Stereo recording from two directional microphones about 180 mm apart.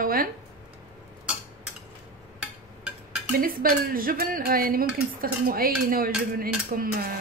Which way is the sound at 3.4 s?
55° right (ahead or behind).